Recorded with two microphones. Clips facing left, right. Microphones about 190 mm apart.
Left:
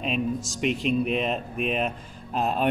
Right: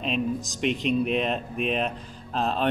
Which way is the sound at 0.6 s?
Centre (ahead or behind).